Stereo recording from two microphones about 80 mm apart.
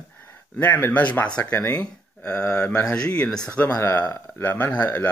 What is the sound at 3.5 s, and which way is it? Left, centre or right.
Speech, left.